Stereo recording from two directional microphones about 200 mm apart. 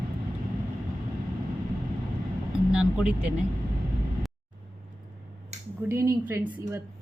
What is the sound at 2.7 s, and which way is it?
Speech, 5° right (ahead or behind).